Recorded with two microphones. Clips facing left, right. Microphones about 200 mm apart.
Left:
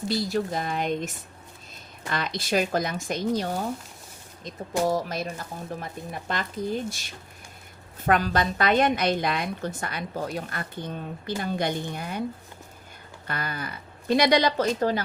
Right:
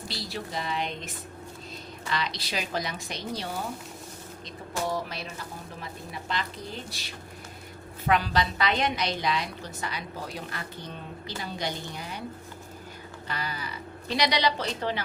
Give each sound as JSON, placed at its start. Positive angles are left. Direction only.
{"t": 0.1, "sound": "a woman's voice", "side_deg": 50}
{"t": 4.9, "sound": "a woman's voice", "side_deg": 45}
{"t": 13.2, "sound": "a woman's voice", "side_deg": 55}